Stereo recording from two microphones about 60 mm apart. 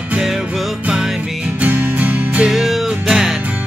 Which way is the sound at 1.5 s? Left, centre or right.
Right.